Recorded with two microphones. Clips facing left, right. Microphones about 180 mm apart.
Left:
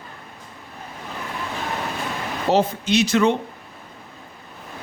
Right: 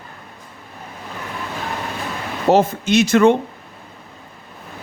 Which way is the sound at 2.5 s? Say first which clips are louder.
Right 4 dB; 50° right (ahead or behind).